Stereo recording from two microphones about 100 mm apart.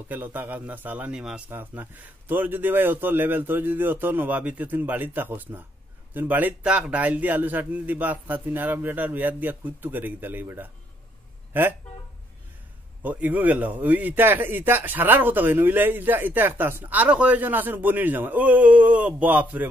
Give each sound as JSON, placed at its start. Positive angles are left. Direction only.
{"t": 0.1, "sound": "a man's voice", "side_deg": -20}
{"t": 13.0, "sound": "a man's voice", "side_deg": -15}